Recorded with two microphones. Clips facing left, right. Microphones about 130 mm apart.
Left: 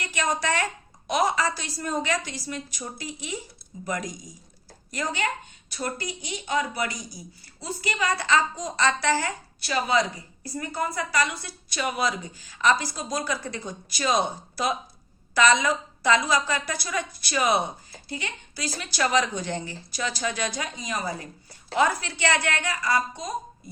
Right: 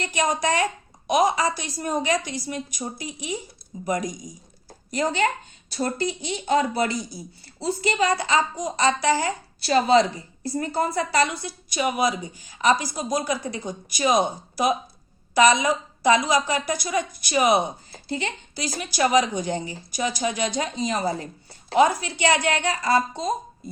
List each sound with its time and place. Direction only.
0.0 s a woman's voice: 20° right (ahead or behind)
5.1 s a woman's voice: 35° right (ahead or behind)
9.6 s a woman's voice: 35° right (ahead or behind)
11.4 s a woman's voice: 15° right (ahead or behind)
17.9 s speech: 30° right (ahead or behind)
18.6 s a woman's voice: 15° right (ahead or behind)
21.8 s a woman's voice: 20° right (ahead or behind)